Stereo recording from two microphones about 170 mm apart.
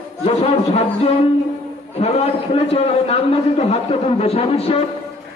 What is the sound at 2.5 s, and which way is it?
A man's voice, 35° left (ahead or behind).